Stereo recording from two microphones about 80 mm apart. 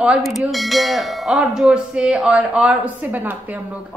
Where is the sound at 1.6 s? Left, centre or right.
Centre.